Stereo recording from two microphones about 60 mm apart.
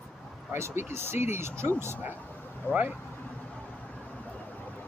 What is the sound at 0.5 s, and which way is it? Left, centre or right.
Speech, right.